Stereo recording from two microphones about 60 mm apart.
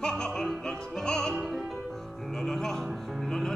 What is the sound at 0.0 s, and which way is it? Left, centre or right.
Music, centre.